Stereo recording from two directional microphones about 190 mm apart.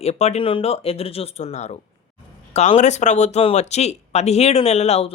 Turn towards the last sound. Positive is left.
turn(degrees=35)  # may be behind; listen again after turning